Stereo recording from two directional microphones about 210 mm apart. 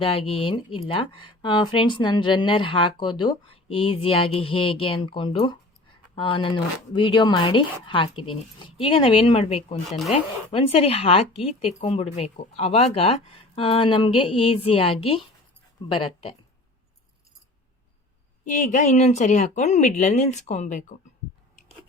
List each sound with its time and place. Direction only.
0.0 s speech: 25° left (ahead or behind)
18.4 s speech: 35° left (ahead or behind)